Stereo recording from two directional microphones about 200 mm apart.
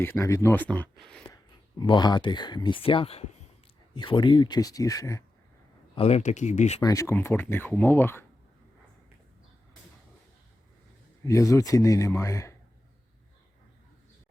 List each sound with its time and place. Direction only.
0.0 s speech: 15° left (ahead or behind)
1.8 s speech: 20° left (ahead or behind)
5.9 s speech: 30° left (ahead or behind)
6.8 s speech: 15° left (ahead or behind)
11.3 s speech: 15° left (ahead or behind)